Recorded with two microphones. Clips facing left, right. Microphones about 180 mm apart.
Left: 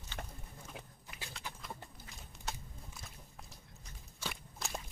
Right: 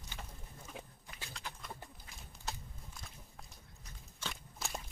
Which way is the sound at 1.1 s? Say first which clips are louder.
Left 1 dB; 5° left (ahead or behind).